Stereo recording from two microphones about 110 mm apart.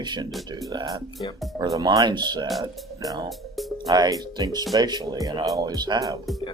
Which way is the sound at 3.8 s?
35° right (ahead or behind).